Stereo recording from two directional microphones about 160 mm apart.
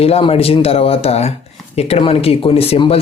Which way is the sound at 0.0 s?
35° left (ahead or behind).